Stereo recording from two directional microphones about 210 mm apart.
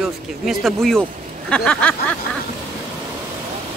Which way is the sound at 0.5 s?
Centre (ahead or behind).